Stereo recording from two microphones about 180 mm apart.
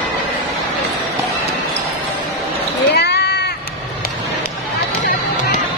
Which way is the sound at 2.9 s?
65° left (ahead or behind).